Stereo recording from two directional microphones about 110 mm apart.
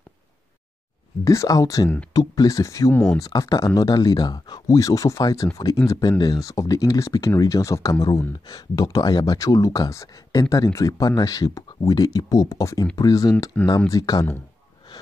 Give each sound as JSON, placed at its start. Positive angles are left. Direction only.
{"t": 1.2, "sound": "speech", "side_deg": 30}